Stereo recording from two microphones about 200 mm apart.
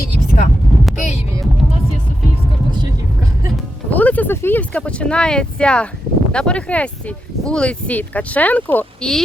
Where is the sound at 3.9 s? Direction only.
10° left (ahead or behind).